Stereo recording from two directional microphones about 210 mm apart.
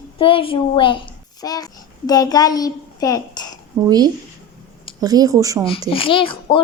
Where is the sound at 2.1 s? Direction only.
20° left (ahead or behind).